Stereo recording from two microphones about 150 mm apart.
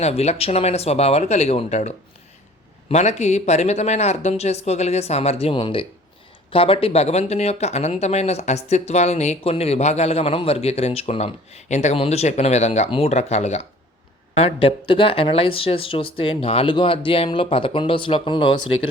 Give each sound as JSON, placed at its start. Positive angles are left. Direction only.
{"t": 0.0, "sound": "speech", "side_deg": 45}
{"t": 2.9, "sound": "speech", "side_deg": 50}